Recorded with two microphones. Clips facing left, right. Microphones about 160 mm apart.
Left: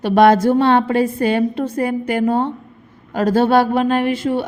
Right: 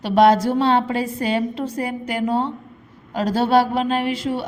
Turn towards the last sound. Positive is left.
turn(degrees=50)  # may be behind; listen again after turning